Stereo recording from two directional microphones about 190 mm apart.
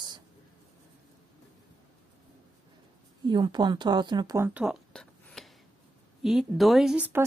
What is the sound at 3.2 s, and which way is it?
Speech, 20° right (ahead or behind).